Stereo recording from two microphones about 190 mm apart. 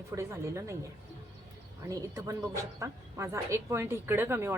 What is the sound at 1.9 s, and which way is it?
Speech, 15° right (ahead or behind).